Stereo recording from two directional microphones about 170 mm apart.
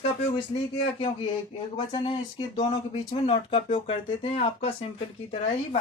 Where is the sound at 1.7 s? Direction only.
30° left (ahead or behind).